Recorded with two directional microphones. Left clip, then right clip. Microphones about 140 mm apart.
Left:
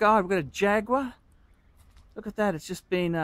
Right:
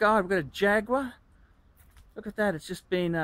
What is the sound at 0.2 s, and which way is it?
Speech, 20° left (ahead or behind).